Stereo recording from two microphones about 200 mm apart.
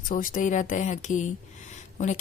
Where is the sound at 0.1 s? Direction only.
40° left (ahead or behind).